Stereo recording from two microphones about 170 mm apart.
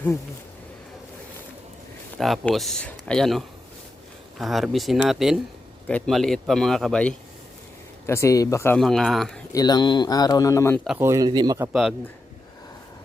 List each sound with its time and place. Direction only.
2.1 s a man's voice: centre (ahead or behind)
8.0 s speech: 15° left (ahead or behind)
8.8 s a man's voice: centre (ahead or behind)
9.5 s speech: 20° left (ahead or behind)
10.8 s speech: 15° right (ahead or behind)
11.7 s a man's voice: centre (ahead or behind)